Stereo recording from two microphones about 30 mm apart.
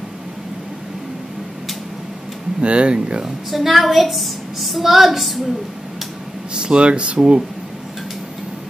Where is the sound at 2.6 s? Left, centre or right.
Right.